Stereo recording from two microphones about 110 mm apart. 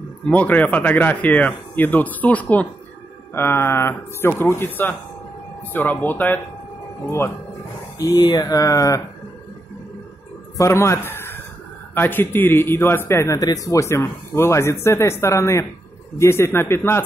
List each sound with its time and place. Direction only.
0.3 s a man's voice: 15° left (ahead or behind)
8.0 s speech: 40° left (ahead or behind)
10.6 s a man's voice: 25° left (ahead or behind)